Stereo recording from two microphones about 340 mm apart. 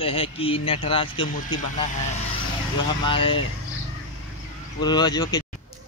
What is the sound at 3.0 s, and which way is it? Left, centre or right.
Speech, centre.